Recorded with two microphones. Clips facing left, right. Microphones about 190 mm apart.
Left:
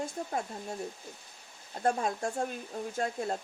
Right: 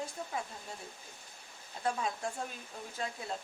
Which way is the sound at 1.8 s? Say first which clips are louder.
Left 5 dB; 45° left (ahead or behind).